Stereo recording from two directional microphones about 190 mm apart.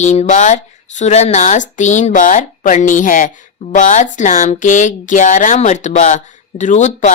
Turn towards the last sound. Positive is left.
turn(degrees=40)  # may be behind; listen again after turning